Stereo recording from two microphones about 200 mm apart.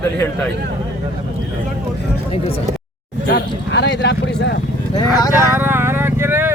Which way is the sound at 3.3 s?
60° left (ahead or behind).